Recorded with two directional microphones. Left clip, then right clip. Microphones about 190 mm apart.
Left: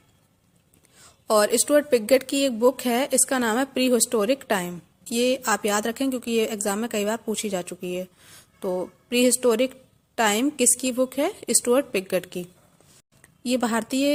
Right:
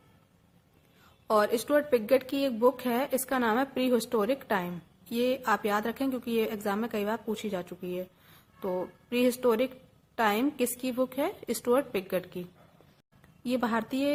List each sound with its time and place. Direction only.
1.3 s a woman's voice: 30° left (ahead or behind)